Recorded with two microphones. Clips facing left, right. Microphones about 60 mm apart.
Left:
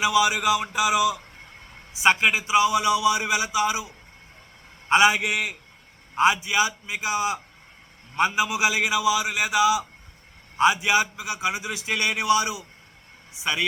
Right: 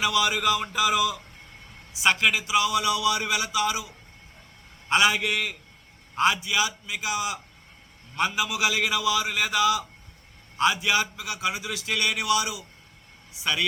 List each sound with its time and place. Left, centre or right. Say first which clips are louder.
0.0 s a man's voice: left 3 dB; centre
1.9 s a man's voice: left 3 dB; left
4.9 s a man's voice: left 3 dB; left